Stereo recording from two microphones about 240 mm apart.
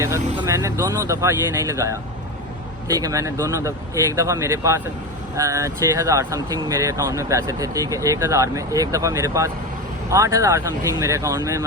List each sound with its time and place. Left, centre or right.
0.0 s speech: centre